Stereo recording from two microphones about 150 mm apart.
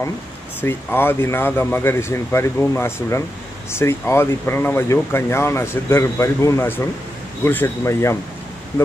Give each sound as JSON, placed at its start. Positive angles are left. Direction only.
{"t": 0.6, "sound": "speech", "side_deg": 15}